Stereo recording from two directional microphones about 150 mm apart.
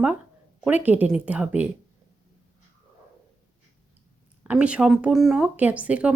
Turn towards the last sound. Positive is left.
turn(degrees=-10)  # may be behind; listen again after turning